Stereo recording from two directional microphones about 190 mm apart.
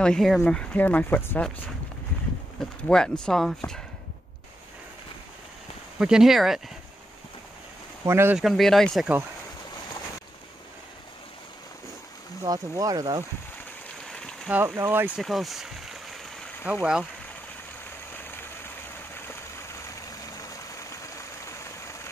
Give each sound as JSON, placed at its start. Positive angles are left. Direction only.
{"t": 0.0, "sound": "speech", "side_deg": 0}
{"t": 2.9, "sound": "speech", "side_deg": 5}
{"t": 5.9, "sound": "speech", "side_deg": -5}
{"t": 8.0, "sound": "speech", "side_deg": -15}
{"t": 8.4, "sound": "speech", "side_deg": 0}
{"t": 12.4, "sound": "speech", "side_deg": -20}
{"t": 14.0, "sound": "a sound", "side_deg": 5}
{"t": 14.5, "sound": "speech", "side_deg": -10}
{"t": 15.1, "sound": "a sound", "side_deg": 0}
{"t": 16.7, "sound": "speech", "side_deg": -5}
{"t": 19.1, "sound": "a sound", "side_deg": 10}